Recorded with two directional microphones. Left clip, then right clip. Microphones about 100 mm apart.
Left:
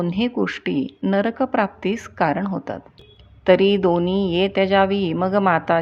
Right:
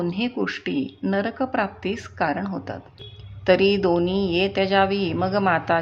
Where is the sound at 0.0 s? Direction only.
30° left (ahead or behind).